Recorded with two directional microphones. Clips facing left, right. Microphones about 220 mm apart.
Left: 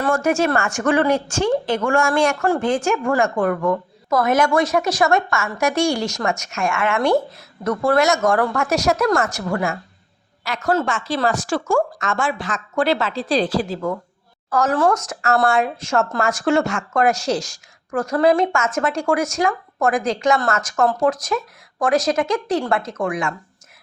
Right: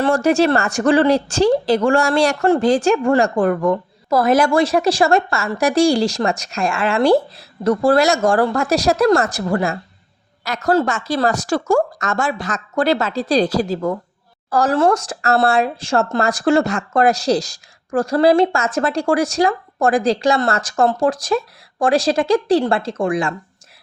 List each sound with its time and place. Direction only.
0.0 s speech: 35° right (ahead or behind)